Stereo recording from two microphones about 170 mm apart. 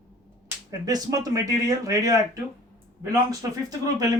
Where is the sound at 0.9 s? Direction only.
20° right (ahead or behind).